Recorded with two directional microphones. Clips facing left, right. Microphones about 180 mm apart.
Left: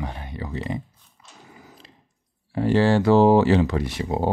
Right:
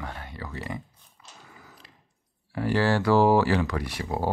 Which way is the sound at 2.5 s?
25° left (ahead or behind).